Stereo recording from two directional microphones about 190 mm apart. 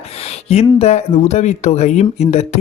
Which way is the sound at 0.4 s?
35° left (ahead or behind).